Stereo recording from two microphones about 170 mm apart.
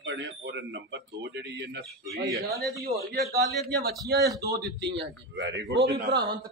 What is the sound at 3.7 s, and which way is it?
A man's voice, 70° right (ahead or behind).